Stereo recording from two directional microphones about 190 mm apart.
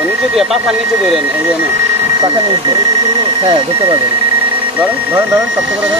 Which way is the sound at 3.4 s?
30° right (ahead or behind).